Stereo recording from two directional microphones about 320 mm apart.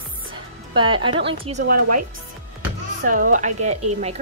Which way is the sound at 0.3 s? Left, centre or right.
Centre.